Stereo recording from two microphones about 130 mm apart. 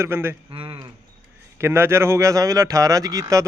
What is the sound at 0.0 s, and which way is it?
Speech, 20° right (ahead or behind).